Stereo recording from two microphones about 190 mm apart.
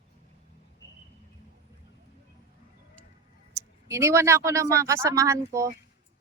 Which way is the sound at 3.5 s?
15° right (ahead or behind).